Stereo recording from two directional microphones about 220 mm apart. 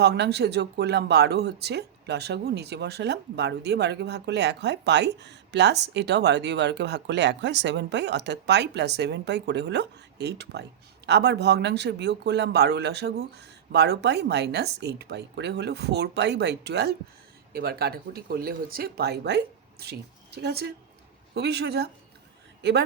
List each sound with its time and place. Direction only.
0.0 s speech: 50° right (ahead or behind)